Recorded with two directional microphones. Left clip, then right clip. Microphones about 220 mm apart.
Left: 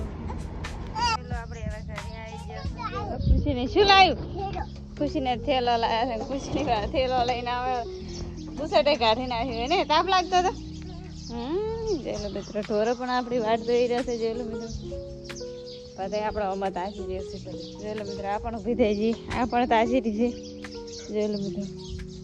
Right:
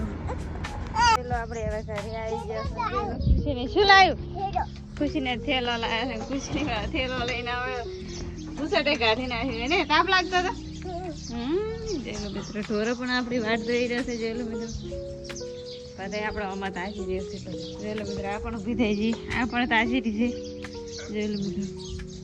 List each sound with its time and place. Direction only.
1.3 s speech: centre (ahead or behind)
5.0 s a woman's voice: 15° left (ahead or behind)
16.0 s a woman's voice: 20° left (ahead or behind)
18.7 s speech: 25° left (ahead or behind)